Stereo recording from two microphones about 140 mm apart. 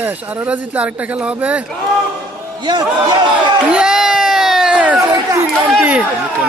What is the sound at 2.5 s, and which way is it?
Speech, 30° right (ahead or behind).